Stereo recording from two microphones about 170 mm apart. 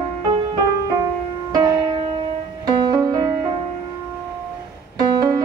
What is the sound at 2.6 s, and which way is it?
Music, 25° right (ahead or behind).